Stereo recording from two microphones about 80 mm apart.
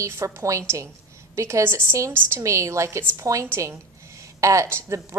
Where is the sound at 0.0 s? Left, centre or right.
Right.